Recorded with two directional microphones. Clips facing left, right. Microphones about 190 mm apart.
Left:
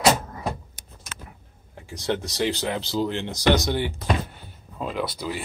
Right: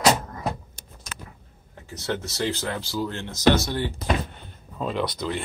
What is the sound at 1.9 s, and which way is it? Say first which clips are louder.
Speech: left 2 dB; 15° left (ahead or behind).